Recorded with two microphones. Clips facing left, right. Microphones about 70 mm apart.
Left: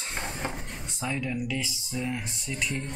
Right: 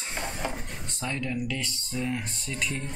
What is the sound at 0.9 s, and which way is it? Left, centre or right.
Speech, centre.